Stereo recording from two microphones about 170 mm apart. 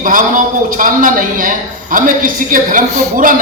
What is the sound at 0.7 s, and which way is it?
A man's voice, 55° right (ahead or behind).